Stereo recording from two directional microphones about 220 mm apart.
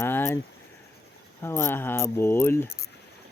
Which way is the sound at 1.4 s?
10° left (ahead or behind).